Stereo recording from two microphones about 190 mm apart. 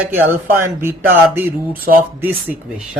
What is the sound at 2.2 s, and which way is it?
Speech, 10° right (ahead or behind).